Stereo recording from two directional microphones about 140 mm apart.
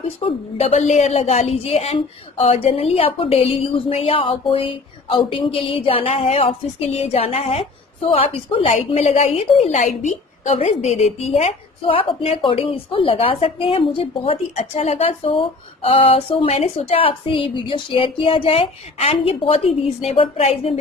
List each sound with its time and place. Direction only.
0.2 s speech: 45° left (ahead or behind)
14.5 s speech: 50° left (ahead or behind)